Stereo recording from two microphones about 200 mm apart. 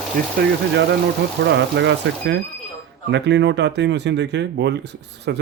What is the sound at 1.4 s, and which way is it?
Speech, 60° right (ahead or behind).